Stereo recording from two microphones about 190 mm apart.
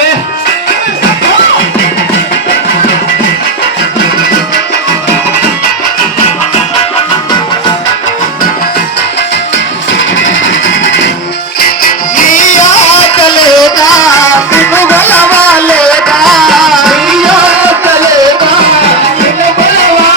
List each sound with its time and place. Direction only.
10.0 s music: 85° left
11.8 s music: 45° left (ahead or behind); by 18.1 s 10° right (ahead or behind)